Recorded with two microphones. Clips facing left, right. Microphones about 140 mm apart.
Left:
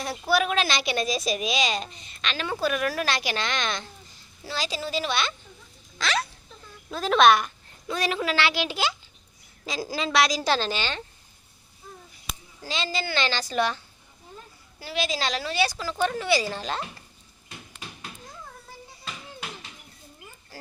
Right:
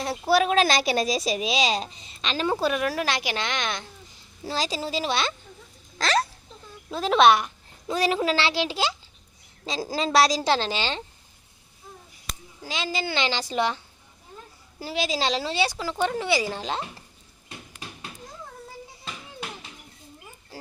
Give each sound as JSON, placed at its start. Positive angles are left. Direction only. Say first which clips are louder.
{"t": 0.0, "sound": "a woman's voice", "louder": "right 3 dB", "side_deg": -30}
{"t": 4.4, "sound": "a woman's voice", "louder": "right 3 dB", "side_deg": -35}
{"t": 6.9, "sound": "a woman's voice", "louder": "right 1 dB", "side_deg": -25}
{"t": 10.5, "sound": "speech", "louder": "right 2 dB", "side_deg": -25}
{"t": 12.6, "sound": "a woman's voice", "louder": "right 1 dB", "side_deg": -10}
{"t": 14.8, "sound": "speech", "louder": "right 2 dB", "side_deg": -35}